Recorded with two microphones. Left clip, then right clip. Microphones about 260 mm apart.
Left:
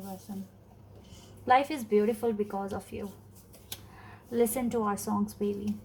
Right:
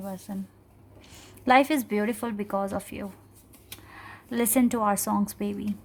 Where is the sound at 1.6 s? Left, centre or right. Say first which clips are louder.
Right 3 dB; right.